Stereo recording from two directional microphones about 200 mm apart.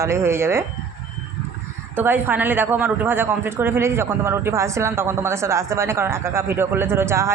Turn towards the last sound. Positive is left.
turn(degrees=-15)  # may be behind; listen again after turning